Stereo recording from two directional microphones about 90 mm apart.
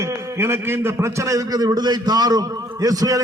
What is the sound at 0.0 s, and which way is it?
A man's voice, 30° right (ahead or behind).